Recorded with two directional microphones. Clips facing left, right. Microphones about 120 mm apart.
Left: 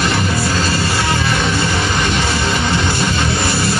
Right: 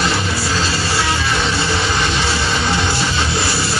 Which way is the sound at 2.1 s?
50° left (ahead or behind).